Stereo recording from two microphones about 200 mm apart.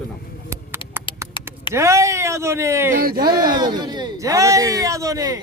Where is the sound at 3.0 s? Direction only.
50° right (ahead or behind).